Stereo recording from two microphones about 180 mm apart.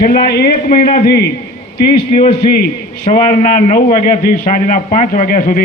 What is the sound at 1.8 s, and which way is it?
A man's voice, 30° left (ahead or behind).